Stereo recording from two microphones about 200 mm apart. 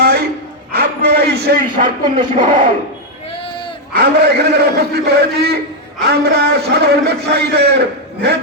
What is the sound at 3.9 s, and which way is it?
A man's voice, 50° right (ahead or behind).